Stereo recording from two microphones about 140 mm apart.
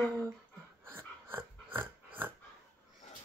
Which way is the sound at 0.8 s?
15° right (ahead or behind).